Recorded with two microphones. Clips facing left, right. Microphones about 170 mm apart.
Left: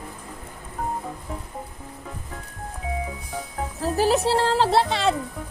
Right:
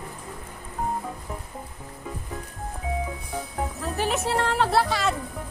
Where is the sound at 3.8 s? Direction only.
35° left (ahead or behind).